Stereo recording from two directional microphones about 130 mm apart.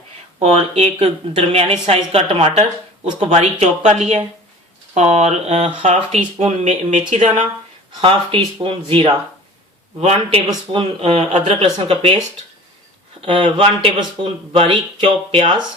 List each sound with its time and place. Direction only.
0.3 s a woman's voice: 55° right (ahead or behind)
7.1 s speech: 70° right (ahead or behind)
8.0 s a woman's voice: 45° right (ahead or behind)
10.0 s speech: 55° right (ahead or behind)
10.7 s a woman's voice: 45° right (ahead or behind)
13.2 s a woman's voice: 40° right (ahead or behind)